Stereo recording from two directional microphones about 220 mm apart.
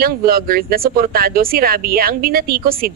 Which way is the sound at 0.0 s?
45° right (ahead or behind).